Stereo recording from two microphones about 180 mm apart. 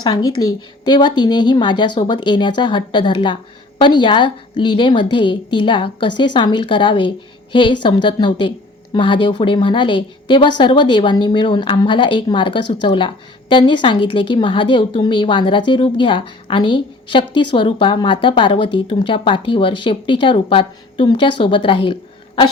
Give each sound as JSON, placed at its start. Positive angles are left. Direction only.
{"t": 0.0, "sound": "a woman's voice", "side_deg": 20}